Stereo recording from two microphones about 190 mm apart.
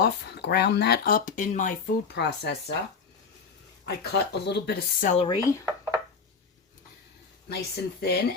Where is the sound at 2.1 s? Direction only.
60° left (ahead or behind).